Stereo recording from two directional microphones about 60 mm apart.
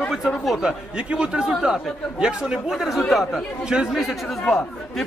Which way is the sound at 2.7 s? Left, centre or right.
Centre.